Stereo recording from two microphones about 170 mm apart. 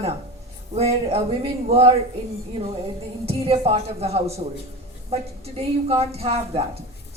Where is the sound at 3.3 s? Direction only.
35° right (ahead or behind).